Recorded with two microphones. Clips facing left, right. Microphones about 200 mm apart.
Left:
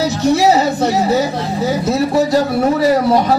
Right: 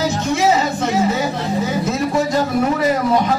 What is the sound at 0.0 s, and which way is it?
A man's voice, 40° left (ahead or behind).